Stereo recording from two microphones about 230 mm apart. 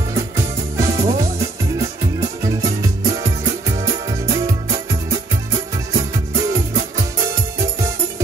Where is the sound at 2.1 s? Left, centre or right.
Centre.